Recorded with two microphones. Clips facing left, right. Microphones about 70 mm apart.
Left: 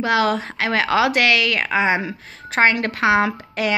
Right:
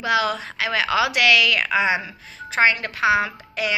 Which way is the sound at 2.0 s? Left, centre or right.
Left.